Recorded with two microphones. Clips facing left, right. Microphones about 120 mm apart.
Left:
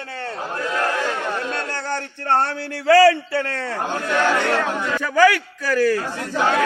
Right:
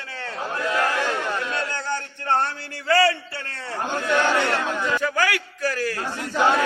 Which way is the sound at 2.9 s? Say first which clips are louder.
Left 7 dB; 90° left.